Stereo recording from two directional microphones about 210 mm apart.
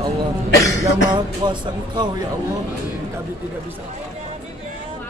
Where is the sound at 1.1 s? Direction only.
20° right (ahead or behind).